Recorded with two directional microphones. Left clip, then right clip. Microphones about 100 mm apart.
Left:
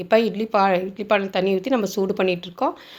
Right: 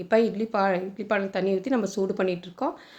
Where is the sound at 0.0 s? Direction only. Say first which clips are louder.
Left 4 dB; 15° left (ahead or behind).